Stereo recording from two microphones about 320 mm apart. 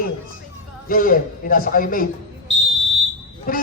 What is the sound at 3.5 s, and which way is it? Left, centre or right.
Music, left.